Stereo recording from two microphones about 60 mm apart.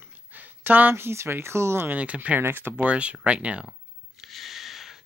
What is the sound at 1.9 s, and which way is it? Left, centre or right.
Speech, right.